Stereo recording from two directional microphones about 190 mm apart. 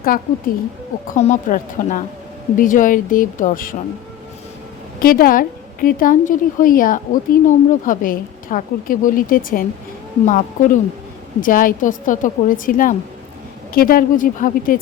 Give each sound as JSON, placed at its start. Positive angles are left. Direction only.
{"t": 0.0, "sound": "a woman's voice", "side_deg": 50}
{"t": 4.9, "sound": "a woman's voice", "side_deg": 50}